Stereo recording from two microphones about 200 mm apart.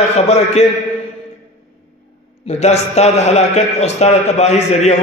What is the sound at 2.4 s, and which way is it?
A man's voice, 35° left (ahead or behind).